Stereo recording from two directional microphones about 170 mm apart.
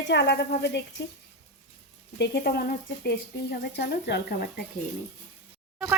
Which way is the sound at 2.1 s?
75° left (ahead or behind).